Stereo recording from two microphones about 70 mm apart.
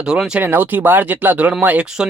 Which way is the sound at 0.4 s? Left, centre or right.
Right.